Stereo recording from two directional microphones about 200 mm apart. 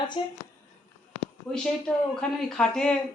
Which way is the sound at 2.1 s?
5° left (ahead or behind).